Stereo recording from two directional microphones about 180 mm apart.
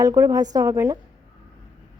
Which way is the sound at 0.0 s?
20° right (ahead or behind).